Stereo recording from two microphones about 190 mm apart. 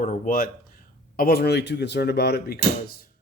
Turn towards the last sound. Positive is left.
turn(degrees=55)  # may be behind; listen again after turning